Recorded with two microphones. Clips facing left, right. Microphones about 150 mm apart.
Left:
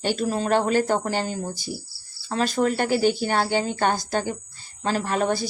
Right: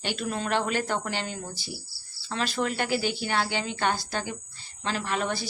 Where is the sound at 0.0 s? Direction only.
40° left (ahead or behind).